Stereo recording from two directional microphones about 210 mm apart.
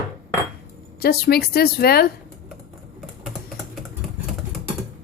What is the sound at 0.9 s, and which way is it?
A woman's voice, 50° left (ahead or behind).